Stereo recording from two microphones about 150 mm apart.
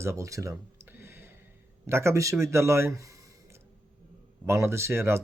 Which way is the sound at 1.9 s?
20° right (ahead or behind).